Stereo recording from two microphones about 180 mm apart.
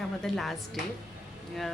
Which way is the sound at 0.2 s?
Centre (ahead or behind).